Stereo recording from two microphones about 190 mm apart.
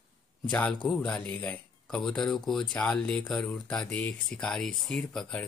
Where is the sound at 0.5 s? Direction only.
5° left (ahead or behind).